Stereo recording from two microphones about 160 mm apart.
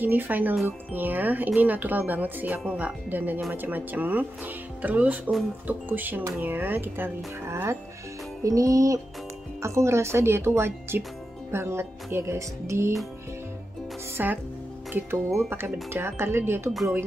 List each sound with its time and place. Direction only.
0.0 s speech: 10° right (ahead or behind)
8.5 s music: 20° right (ahead or behind)
9.6 s speech: 20° right (ahead or behind)
14.1 s speech: 10° right (ahead or behind)